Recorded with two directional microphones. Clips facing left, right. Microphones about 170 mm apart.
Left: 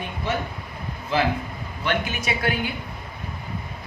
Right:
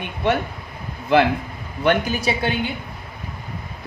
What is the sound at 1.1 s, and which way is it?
Speech, 65° right (ahead or behind).